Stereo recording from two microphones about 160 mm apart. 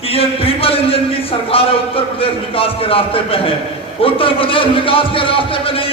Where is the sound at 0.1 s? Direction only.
35° left (ahead or behind).